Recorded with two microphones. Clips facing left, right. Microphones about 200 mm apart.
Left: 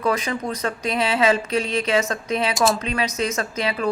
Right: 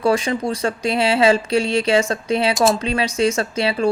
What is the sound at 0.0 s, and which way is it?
Speech, 30° right (ahead or behind).